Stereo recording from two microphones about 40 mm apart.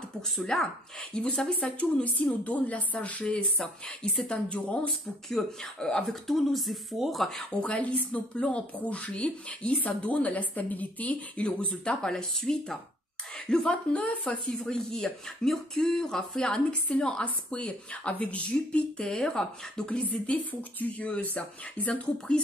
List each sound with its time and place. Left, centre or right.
0.5 s a woman's voice: centre
1.5 s a woman's voice: left
5.4 s speech: centre
5.8 s a woman's voice: centre
6.0 s speech: centre
7.6 s a woman's voice: left
11.4 s a woman's voice: left
18.9 s speech: centre
19.9 s a woman's voice: left